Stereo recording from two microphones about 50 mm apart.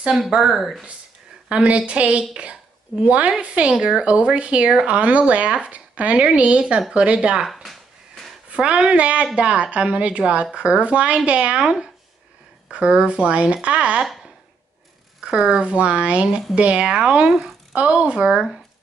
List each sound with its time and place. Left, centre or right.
0.1 s speech: centre
1.5 s a woman's voice: right
7.4 s a sound: centre
8.5 s a sound: right
8.8 s speech: right
15.1 s speech: centre